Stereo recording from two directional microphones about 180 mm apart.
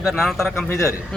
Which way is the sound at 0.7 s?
15° left (ahead or behind).